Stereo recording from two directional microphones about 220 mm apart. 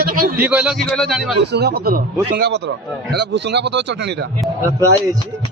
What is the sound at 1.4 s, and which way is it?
Speech, 50° right (ahead or behind).